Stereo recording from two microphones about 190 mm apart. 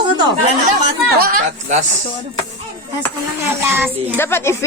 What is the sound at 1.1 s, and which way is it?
Speech, 50° right (ahead or behind).